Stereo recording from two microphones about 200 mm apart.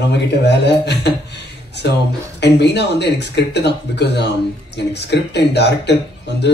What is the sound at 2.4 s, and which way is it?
Speech, 60° left (ahead or behind).